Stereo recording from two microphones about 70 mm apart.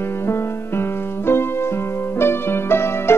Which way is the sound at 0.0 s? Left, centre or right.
Left.